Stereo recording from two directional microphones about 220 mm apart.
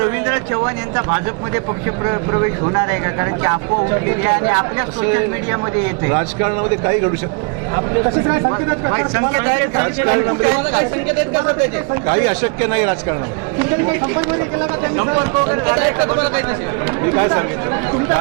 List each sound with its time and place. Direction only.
0.0 s speech: 20° right (ahead or behind)
6.1 s speech: 20° right (ahead or behind)
8.0 s speech: 20° right (ahead or behind)
12.0 s speech: 20° right (ahead or behind)